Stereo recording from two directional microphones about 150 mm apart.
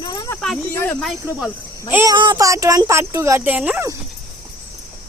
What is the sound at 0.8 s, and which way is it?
Speech, 10° left (ahead or behind).